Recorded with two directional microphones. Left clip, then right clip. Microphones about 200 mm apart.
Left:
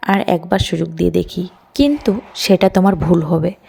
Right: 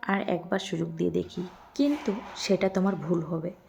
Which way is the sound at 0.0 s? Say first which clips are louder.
Left 13 dB; 35° left (ahead or behind).